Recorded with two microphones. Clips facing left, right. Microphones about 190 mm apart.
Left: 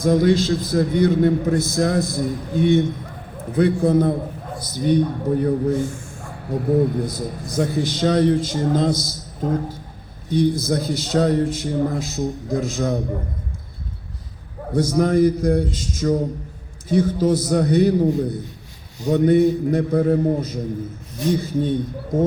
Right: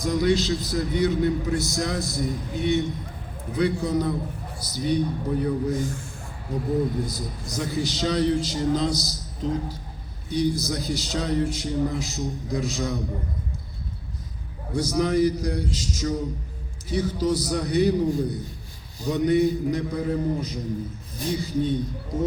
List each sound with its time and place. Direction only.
0.0 s a man's voice: 50° left (ahead or behind)
5.8 s speech: 35° right (ahead or behind)
7.0 s a man's voice: 55° left (ahead or behind)
14.7 s a man's voice: 55° left (ahead or behind)